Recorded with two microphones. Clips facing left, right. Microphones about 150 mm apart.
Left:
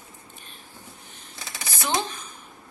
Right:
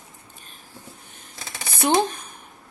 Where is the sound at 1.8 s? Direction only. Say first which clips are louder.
Right 7 dB; 55° right (ahead or behind).